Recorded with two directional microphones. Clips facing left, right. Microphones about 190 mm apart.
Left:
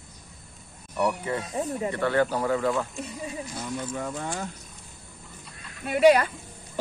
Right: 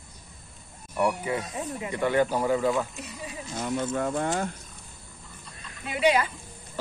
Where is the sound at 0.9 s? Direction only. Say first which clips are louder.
Even; 10° right (ahead or behind).